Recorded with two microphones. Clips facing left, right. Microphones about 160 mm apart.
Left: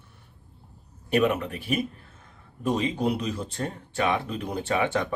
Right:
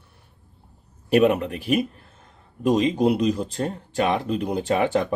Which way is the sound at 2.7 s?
35° right (ahead or behind).